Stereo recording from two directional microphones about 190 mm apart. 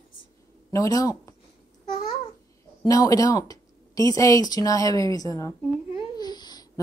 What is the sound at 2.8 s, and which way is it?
Speech, 20° left (ahead or behind).